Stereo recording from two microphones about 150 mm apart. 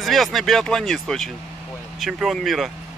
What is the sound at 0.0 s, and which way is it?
Speech, centre (ahead or behind).